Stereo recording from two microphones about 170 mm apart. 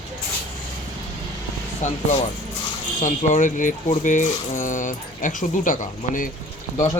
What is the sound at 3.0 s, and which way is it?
Speech, 45° left (ahead or behind).